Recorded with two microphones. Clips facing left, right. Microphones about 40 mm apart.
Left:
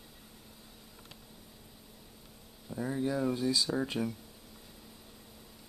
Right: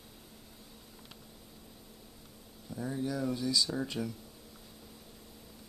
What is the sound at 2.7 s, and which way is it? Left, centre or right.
Speech, left.